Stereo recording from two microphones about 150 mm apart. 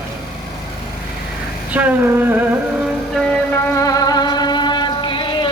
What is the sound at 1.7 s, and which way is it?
Female singing, 10° right (ahead or behind).